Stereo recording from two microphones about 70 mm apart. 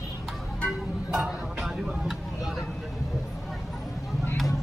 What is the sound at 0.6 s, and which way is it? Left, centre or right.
Music, centre.